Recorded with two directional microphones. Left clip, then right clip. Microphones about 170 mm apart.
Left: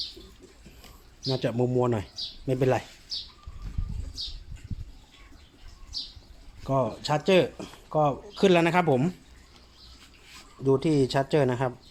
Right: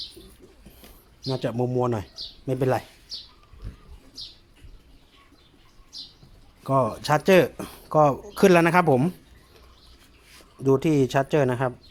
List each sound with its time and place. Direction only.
1.2 s speech: 10° right (ahead or behind)
6.7 s speech: 25° right (ahead or behind)
10.6 s speech: 30° right (ahead or behind)